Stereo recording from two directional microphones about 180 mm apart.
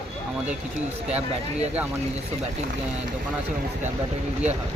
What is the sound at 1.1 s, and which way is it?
Speech, 35° right (ahead or behind).